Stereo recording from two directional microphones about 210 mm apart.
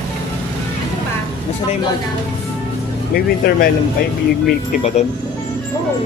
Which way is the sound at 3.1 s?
45° left (ahead or behind).